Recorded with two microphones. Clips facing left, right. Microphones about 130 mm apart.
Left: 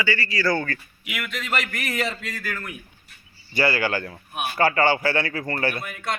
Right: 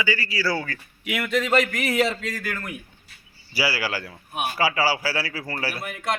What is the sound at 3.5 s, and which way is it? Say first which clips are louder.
A man's voice: left 3 dB; 5° right (ahead or behind).